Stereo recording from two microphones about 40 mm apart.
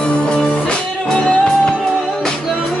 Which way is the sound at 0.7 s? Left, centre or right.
Left.